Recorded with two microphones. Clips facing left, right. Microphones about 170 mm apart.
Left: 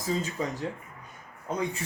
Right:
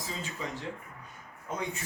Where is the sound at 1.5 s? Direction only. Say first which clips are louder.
Left 5 dB; 35° left (ahead or behind).